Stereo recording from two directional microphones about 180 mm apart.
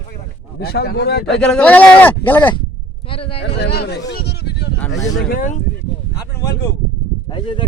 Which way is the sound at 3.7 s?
65° left (ahead or behind).